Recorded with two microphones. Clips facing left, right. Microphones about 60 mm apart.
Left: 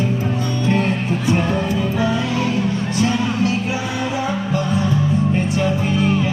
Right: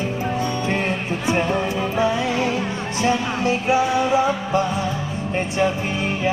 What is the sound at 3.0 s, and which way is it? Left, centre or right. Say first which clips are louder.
Music: even; right.